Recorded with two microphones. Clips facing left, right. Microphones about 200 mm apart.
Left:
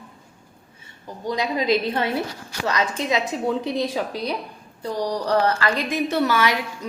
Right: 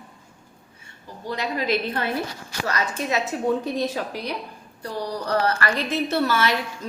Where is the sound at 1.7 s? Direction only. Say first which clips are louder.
Left 3 dB; 15° left (ahead or behind).